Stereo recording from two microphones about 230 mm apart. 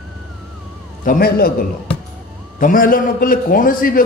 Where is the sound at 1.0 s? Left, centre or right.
Left.